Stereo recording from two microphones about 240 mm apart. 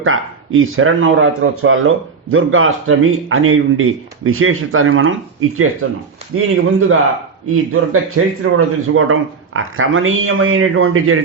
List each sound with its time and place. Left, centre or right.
0.0 s speech: right